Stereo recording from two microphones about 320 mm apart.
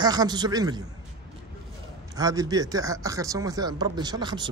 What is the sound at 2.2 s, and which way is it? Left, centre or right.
Speech, centre.